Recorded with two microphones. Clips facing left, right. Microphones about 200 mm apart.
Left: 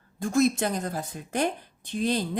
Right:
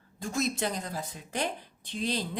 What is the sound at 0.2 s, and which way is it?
A woman's voice, 50° left (ahead or behind).